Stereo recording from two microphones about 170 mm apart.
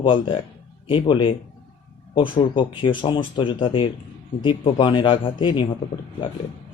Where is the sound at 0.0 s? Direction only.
30° left (ahead or behind).